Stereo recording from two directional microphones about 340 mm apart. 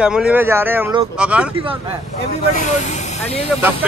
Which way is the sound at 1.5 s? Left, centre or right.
Centre.